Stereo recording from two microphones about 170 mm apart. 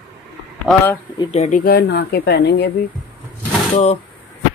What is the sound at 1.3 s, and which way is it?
Speech, 40° left (ahead or behind).